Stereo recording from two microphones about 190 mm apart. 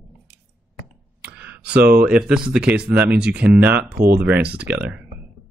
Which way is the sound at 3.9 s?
50° right (ahead or behind).